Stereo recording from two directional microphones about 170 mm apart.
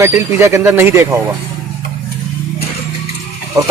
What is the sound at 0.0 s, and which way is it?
Speech, 15° right (ahead or behind).